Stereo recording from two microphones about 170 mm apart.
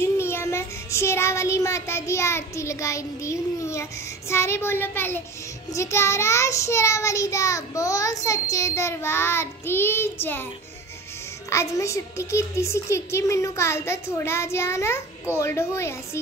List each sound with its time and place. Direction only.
0.0 s child singing: 15° left (ahead or behind)
11.5 s child singing: 15° left (ahead or behind)